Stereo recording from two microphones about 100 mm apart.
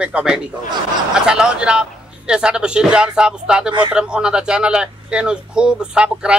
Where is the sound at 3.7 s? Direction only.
55° right (ahead or behind).